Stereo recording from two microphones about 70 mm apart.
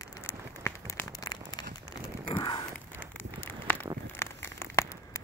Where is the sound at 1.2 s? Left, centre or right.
Left.